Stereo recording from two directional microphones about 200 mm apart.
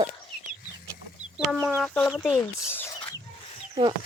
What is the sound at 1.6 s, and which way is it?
Speech, centre (ahead or behind).